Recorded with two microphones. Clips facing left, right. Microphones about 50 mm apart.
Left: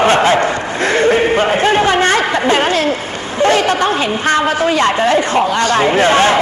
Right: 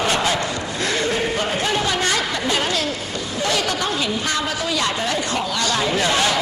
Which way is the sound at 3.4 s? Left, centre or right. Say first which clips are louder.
Left 10 dB; left.